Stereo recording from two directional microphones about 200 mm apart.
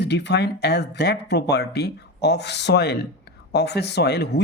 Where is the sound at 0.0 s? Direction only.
60° left (ahead or behind).